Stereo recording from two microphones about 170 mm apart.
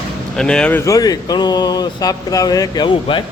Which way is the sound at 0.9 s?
20° left (ahead or behind).